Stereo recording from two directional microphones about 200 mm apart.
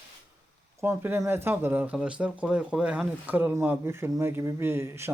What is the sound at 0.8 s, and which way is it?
Speech, 10° right (ahead or behind).